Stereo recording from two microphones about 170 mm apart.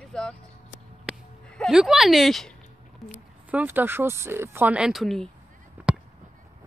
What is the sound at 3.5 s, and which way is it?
Speech, 10° right (ahead or behind).